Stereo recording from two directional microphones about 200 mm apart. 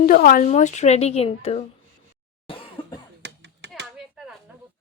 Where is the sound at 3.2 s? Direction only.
60° right (ahead or behind).